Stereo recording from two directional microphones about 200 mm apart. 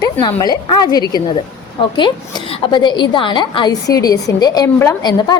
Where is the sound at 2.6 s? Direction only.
20° left (ahead or behind).